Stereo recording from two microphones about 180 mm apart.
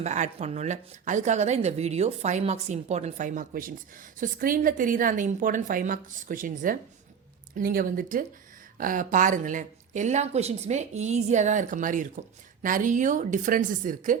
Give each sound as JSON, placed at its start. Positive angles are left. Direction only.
{"t": 0.0, "sound": "a woman's voice", "side_deg": -40}